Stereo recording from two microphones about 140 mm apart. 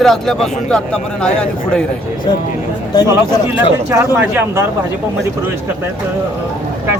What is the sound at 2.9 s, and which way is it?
Speech, 30° left (ahead or behind).